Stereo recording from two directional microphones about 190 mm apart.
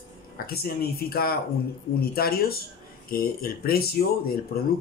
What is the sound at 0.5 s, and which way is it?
Speech, 55° left (ahead or behind).